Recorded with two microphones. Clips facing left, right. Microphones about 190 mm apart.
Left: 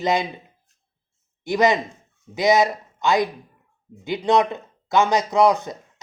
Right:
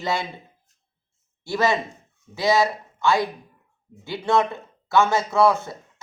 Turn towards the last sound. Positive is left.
turn(degrees=15)  # may be behind; listen again after turning